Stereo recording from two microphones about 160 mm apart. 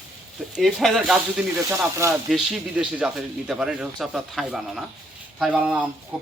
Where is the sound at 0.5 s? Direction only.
Centre (ahead or behind).